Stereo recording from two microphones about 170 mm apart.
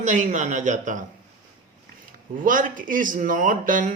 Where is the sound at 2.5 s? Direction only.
50° right (ahead or behind).